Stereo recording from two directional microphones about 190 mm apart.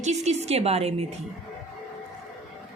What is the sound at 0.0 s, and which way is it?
A woman's voice, 35° right (ahead or behind).